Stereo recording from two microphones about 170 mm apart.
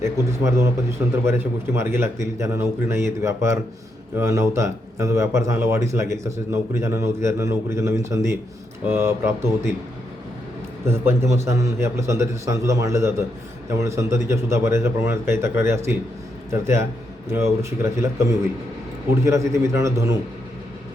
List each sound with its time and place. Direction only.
0.0 s speech: 15° right (ahead or behind)
10.8 s speech: 15° right (ahead or behind)